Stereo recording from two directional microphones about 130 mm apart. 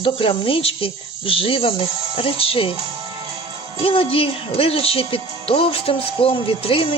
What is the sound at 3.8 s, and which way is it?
Speech, 45° left (ahead or behind).